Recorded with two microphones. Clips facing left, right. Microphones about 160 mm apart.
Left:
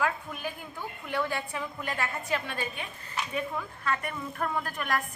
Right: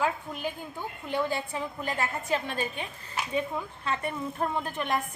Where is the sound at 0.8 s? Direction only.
25° right (ahead or behind).